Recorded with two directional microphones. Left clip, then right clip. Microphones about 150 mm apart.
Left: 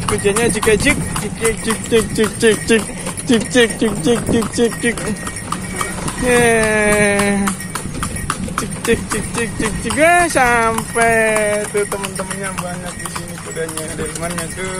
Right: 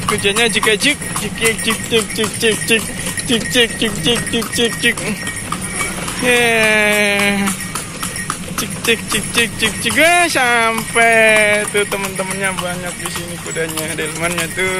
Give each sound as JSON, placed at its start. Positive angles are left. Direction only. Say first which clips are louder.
{"t": 0.2, "sound": "speech", "louder": "right 1 dB", "side_deg": 5}
{"t": 1.9, "sound": "speech", "louder": "left 4 dB", "side_deg": 45}
{"t": 6.2, "sound": "speech", "louder": "right 1 dB", "side_deg": 20}
{"t": 9.9, "sound": "speech", "louder": "left 1 dB", "side_deg": 10}